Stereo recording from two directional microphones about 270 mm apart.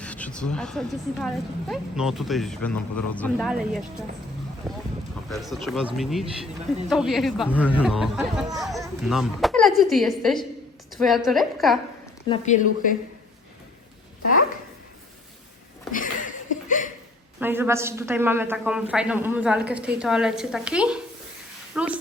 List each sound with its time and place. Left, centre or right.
0.0 s speech: centre
12.3 s speech: centre
15.9 s a sound: left
17.4 s speech: centre